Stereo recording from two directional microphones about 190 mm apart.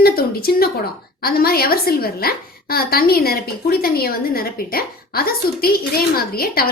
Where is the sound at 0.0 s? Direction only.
55° left (ahead or behind).